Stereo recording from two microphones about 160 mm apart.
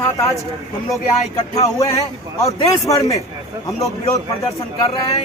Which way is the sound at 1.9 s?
20° left (ahead or behind).